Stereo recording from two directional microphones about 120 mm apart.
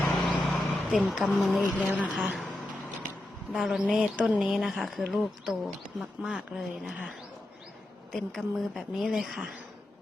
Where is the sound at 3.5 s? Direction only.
Centre (ahead or behind).